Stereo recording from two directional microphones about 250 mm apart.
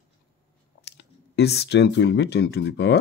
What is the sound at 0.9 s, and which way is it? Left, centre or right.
Speech, left.